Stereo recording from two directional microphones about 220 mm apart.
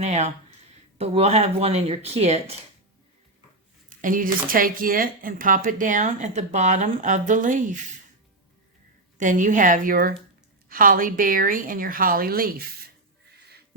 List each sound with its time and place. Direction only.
0.0 s speech: 30° right (ahead or behind)
3.8 s speech: 40° right (ahead or behind)
9.1 s speech: 35° right (ahead or behind)